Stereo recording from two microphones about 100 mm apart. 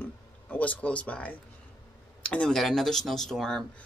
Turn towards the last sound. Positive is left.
turn(degrees=5)  # may be behind; listen again after turning